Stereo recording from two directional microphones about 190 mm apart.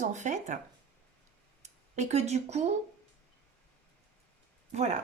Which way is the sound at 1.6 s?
40° right (ahead or behind).